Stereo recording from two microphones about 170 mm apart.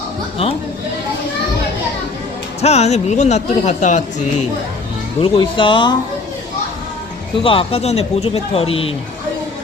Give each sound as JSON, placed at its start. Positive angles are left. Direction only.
{"t": 2.6, "sound": "speech", "side_deg": 40}
{"t": 5.2, "sound": "speech", "side_deg": 30}
{"t": 7.3, "sound": "speech", "side_deg": 30}